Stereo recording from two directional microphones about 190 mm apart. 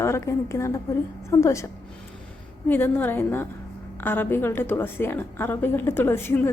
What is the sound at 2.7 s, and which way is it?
A woman's voice, 10° left (ahead or behind).